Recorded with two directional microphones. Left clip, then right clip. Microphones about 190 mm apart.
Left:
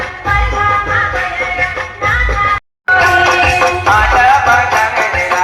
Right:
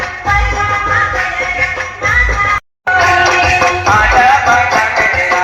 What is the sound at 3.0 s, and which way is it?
Music, 25° right (ahead or behind).